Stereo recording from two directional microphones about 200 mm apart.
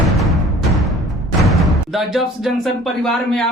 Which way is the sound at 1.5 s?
Centre (ahead or behind).